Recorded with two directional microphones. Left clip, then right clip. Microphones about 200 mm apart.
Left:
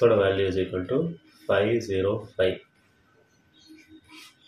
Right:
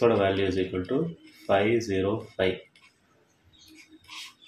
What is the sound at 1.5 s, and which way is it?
Speech, 20° right (ahead or behind).